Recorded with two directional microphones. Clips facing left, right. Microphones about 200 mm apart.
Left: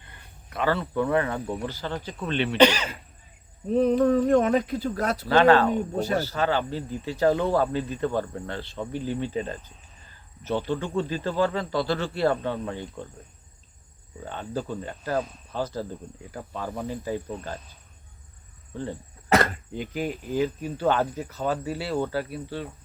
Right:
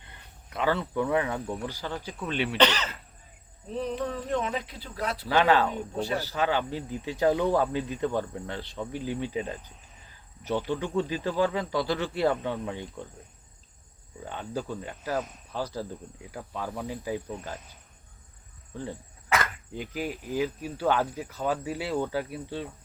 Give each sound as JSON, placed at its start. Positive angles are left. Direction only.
{"t": 0.5, "sound": "speech", "side_deg": -15}
{"t": 2.6, "sound": "speech", "side_deg": 10}
{"t": 3.7, "sound": "speech", "side_deg": 50}
{"t": 5.3, "sound": "speech", "side_deg": -10}
{"t": 6.0, "sound": "speech", "side_deg": 45}
{"t": 6.2, "sound": "speech", "side_deg": -15}
{"t": 14.3, "sound": "speech", "side_deg": -10}
{"t": 16.8, "sound": "speech", "side_deg": -10}
{"t": 19.3, "sound": "dog", "side_deg": 40}
{"t": 19.7, "sound": "speech", "side_deg": -5}
{"t": 22.0, "sound": "insect", "side_deg": -20}